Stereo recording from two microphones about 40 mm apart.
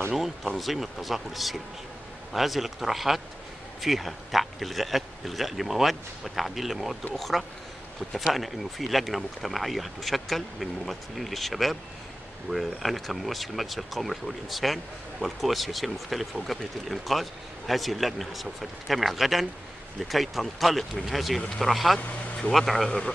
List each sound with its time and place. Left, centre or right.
0.6 s speech: centre